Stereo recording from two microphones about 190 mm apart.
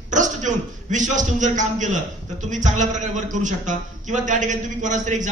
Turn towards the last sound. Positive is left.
turn(degrees=-40)  # may be behind; listen again after turning